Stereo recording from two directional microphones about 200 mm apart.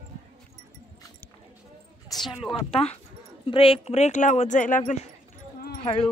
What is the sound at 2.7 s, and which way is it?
Speech, 30° left (ahead or behind).